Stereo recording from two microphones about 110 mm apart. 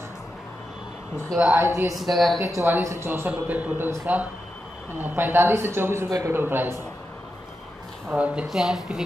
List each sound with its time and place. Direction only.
1.3 s speech: 5° right (ahead or behind)
2.7 s a man's voice: 25° right (ahead or behind)
8.1 s speech: 10° right (ahead or behind)